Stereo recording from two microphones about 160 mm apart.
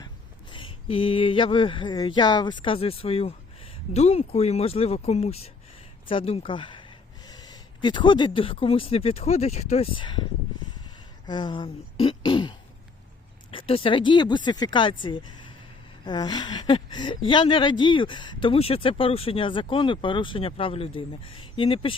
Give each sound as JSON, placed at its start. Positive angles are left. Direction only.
{"t": 0.5, "sound": "speech", "side_deg": 35}
{"t": 11.3, "sound": "throat clearing", "side_deg": 30}
{"t": 13.5, "sound": "speech", "side_deg": 35}
{"t": 16.0, "sound": "throat clearing", "side_deg": 25}
{"t": 16.9, "sound": "speech", "side_deg": 30}